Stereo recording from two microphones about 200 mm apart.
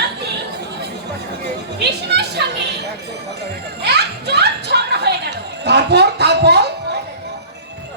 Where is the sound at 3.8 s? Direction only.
55° right (ahead or behind).